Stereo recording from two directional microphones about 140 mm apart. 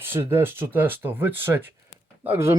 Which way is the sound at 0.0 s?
15° right (ahead or behind).